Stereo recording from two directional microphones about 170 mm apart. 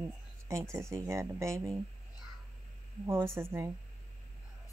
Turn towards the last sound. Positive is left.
turn(degrees=-15)  # may be behind; listen again after turning